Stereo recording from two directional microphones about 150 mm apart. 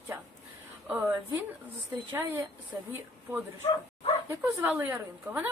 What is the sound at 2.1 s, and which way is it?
Speech, 15° right (ahead or behind).